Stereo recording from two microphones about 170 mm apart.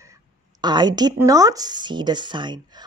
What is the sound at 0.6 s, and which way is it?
A woman's voice, 25° right (ahead or behind).